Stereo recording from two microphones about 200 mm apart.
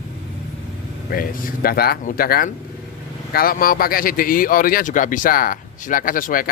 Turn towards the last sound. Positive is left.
turn(degrees=45)  # may be behind; listen again after turning